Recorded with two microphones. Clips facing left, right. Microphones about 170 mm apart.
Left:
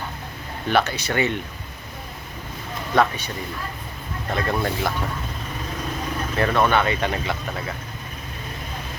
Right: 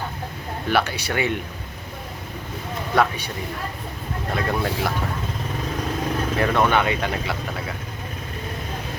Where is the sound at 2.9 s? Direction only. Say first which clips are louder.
Left 1 dB; 10° right (ahead or behind).